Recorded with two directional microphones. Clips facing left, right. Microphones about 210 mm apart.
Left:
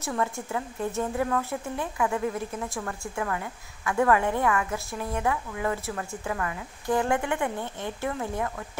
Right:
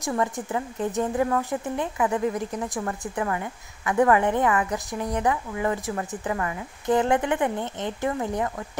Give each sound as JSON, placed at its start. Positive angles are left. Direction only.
{"t": 0.0, "sound": "a woman's voice", "side_deg": -15}